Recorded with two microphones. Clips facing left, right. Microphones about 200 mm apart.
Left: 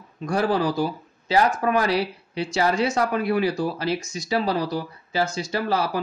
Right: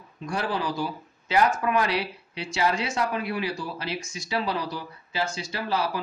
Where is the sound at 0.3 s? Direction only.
45° left (ahead or behind).